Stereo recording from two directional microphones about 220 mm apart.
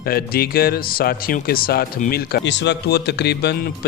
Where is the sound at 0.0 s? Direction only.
45° left (ahead or behind).